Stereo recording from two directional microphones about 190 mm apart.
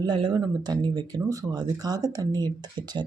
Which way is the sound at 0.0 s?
25° right (ahead or behind).